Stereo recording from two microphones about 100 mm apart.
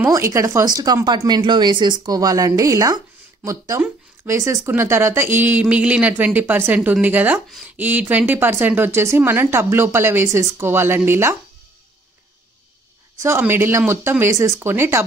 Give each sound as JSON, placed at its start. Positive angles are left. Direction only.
{"t": 0.1, "sound": "speech", "side_deg": -30}
{"t": 13.2, "sound": "speech", "side_deg": -25}